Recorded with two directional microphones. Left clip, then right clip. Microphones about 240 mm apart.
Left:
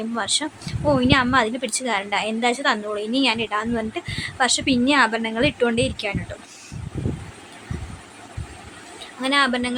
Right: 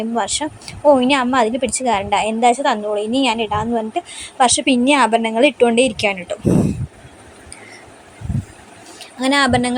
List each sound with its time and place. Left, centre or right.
0.1 s a woman's voice: centre
9.2 s a woman's voice: right